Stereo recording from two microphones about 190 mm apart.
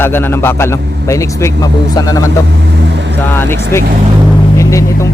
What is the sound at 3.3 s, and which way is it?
A man's voice, 10° left (ahead or behind).